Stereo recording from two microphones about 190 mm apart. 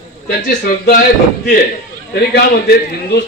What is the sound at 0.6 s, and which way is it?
Speech, 50° left (ahead or behind).